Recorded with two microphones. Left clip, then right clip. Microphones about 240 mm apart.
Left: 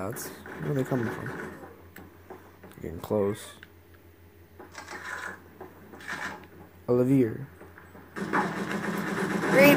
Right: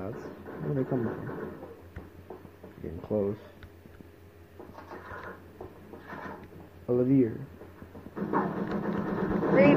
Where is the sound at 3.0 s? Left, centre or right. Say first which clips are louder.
Left 3 dB; left.